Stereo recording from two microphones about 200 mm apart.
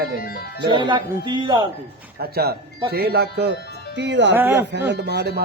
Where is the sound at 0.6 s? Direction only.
25° right (ahead or behind).